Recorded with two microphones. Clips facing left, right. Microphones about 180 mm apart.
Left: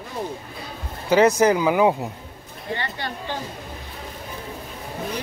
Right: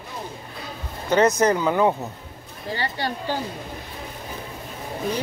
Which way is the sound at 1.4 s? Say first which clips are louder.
Left 2 dB; 10° left (ahead or behind).